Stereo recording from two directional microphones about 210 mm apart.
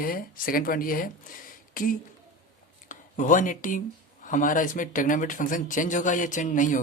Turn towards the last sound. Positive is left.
turn(degrees=40)  # may be behind; listen again after turning